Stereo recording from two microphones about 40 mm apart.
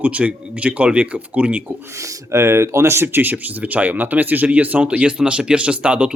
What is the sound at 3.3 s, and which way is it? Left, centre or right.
Speech, right.